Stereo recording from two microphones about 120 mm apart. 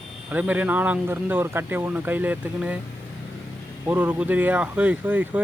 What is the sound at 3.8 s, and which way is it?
Speech, 15° right (ahead or behind).